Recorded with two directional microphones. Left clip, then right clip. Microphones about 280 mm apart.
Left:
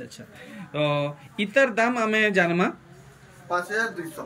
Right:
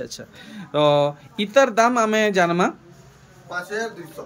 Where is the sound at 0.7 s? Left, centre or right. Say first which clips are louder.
Right 8 dB; centre.